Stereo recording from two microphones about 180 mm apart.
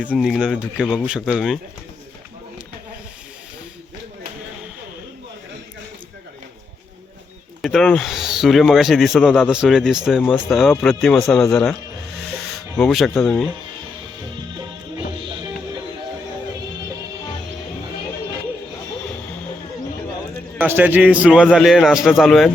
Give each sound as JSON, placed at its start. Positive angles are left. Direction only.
{"t": 0.0, "sound": "speech", "side_deg": -5}
{"t": 7.6, "sound": "speech", "side_deg": 0}
{"t": 12.8, "sound": "speech", "side_deg": 0}
{"t": 20.6, "sound": "a man's voice", "side_deg": -10}